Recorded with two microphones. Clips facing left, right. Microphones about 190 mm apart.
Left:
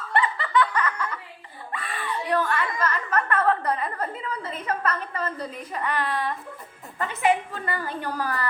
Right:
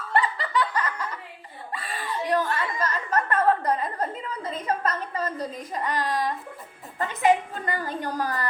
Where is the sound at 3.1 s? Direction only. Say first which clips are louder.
Right 2 dB; 35° right (ahead or behind).